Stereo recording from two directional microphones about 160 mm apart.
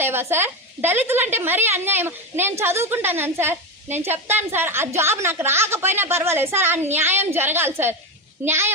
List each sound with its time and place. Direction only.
0.0 s a woman's voice: 15° right (ahead or behind)